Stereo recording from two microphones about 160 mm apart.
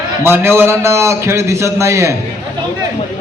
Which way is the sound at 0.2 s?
15° right (ahead or behind).